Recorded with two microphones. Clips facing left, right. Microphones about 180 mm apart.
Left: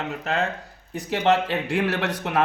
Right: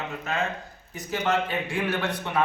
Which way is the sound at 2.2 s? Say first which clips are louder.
Left 3 dB; 80° left.